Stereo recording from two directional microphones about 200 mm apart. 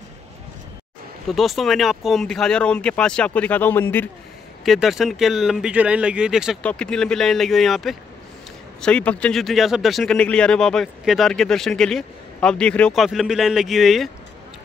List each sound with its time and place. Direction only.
1.2 s speech: centre (ahead or behind)
4.6 s speech: centre (ahead or behind)